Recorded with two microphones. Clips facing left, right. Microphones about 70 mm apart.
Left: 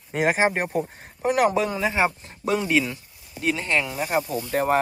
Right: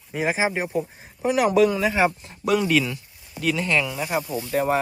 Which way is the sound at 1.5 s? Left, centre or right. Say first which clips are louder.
Right 4 dB; left.